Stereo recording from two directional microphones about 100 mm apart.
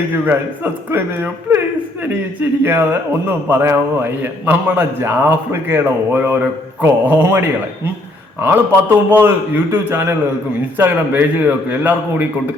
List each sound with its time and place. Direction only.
0.3 s a man's voice: 20° right (ahead or behind)